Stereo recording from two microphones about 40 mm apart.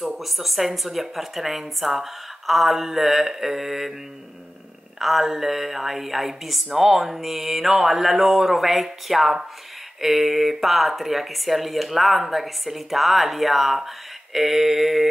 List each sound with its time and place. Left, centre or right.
0.0 s speech: centre
4.9 s speech: centre